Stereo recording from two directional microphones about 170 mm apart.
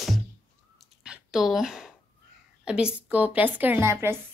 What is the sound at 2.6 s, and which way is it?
A woman's voice, 5° right (ahead or behind).